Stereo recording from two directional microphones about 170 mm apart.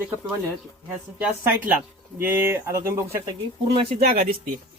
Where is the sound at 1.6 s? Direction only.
10° right (ahead or behind).